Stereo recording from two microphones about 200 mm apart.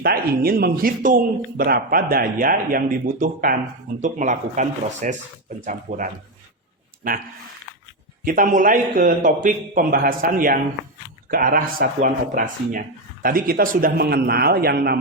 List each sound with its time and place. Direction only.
0.0 s speech: 50° right (ahead or behind)
7.0 s speech: 45° right (ahead or behind)
8.2 s speech: 45° right (ahead or behind)